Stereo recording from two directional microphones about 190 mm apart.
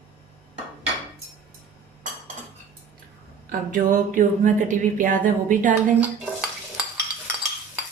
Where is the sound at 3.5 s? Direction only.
45° right (ahead or behind).